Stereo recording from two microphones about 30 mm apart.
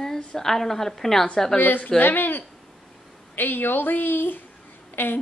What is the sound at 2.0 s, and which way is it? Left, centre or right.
Speech, left.